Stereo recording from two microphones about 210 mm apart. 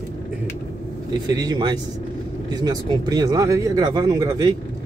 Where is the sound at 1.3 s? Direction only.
20° right (ahead or behind).